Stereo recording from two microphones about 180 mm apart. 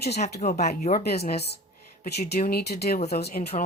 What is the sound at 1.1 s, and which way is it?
Speech, 60° left (ahead or behind).